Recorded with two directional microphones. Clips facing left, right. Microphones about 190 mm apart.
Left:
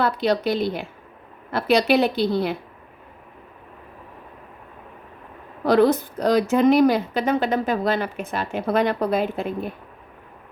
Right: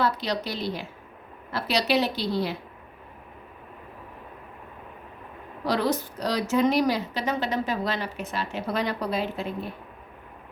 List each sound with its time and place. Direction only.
0.0 s a woman's voice: 55° left (ahead or behind)
5.6 s speech: 55° left (ahead or behind)